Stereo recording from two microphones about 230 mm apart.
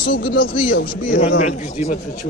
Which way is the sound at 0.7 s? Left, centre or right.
Left.